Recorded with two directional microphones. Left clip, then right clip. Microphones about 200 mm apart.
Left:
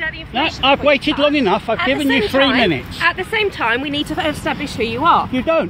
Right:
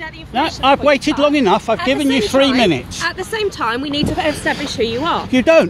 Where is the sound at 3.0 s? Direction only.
60° right (ahead or behind).